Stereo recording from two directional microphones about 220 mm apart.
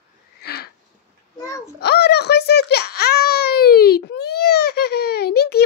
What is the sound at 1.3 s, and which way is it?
Babbling, 15° left (ahead or behind).